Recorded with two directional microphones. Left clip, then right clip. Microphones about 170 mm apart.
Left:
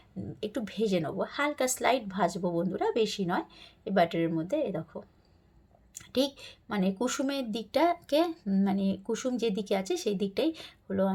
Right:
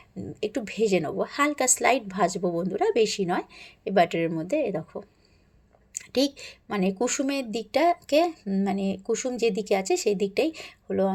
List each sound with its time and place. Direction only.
0.3 s a woman's voice: 20° right (ahead or behind)